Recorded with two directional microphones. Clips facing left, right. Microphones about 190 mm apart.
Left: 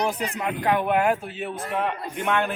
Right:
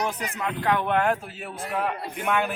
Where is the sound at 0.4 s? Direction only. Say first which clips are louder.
Left 1 dB; 15° left (ahead or behind).